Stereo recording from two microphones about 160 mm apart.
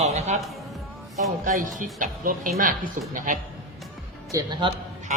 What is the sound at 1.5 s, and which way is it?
Speech, 55° right (ahead or behind).